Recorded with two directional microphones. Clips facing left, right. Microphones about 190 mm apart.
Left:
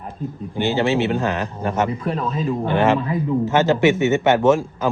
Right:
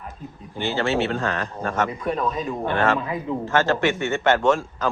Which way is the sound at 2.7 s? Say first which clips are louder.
Left 4 dB; 20° left (ahead or behind).